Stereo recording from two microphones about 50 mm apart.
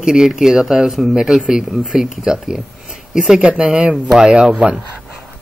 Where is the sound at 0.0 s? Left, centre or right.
Centre.